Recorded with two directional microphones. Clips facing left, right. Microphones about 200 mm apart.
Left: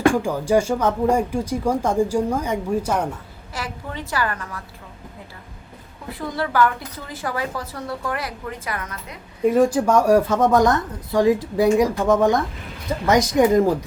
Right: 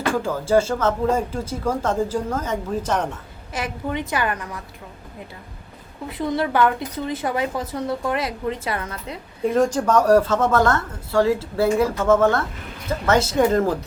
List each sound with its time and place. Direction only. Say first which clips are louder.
0.0 s speech: left 4 dB; 15° left (ahead or behind)
3.5 s speech: right 5 dB; 20° right (ahead or behind)
6.1 s speech: right 3 dB; 20° right (ahead or behind)
9.4 s speech: left 3 dB; 10° left (ahead or behind)